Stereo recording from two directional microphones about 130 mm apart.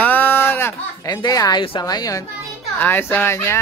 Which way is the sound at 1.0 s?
30° left (ahead or behind).